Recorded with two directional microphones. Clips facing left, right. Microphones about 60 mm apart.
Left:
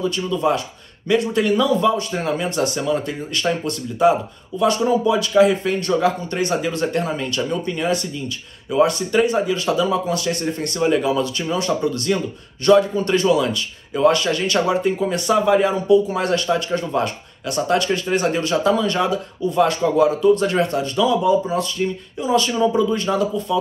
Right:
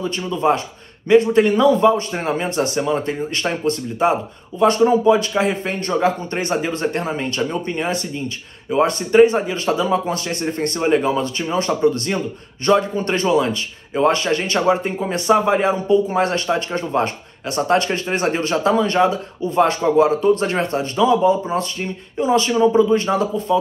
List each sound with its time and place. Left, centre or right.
0.0 s speech: right